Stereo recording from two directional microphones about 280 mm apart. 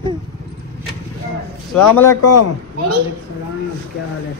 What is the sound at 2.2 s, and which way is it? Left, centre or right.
Speech, left.